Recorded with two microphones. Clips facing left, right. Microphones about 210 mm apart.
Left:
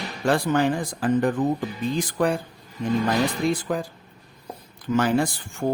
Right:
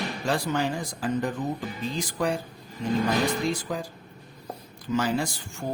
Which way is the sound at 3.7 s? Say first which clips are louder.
Left 5 dB; 55° left (ahead or behind).